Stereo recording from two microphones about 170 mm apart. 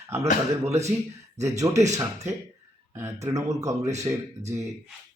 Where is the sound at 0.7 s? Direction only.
40° right (ahead or behind).